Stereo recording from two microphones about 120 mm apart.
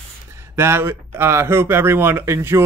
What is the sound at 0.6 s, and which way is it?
Speech, 20° right (ahead or behind).